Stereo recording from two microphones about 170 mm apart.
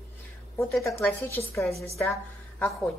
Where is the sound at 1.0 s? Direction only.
15° left (ahead or behind).